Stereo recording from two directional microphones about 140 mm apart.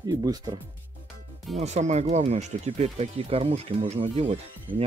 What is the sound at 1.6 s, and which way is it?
Speech, 55° right (ahead or behind).